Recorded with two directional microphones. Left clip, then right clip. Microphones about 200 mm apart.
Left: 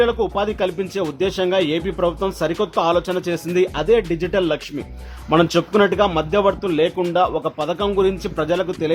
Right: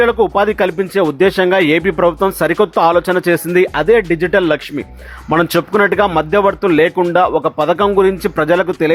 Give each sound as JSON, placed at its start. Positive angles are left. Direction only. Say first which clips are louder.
{"t": 0.0, "sound": "speech", "louder": "right 7 dB", "side_deg": -15}